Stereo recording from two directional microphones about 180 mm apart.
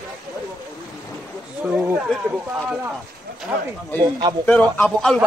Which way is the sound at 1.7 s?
5° right (ahead or behind).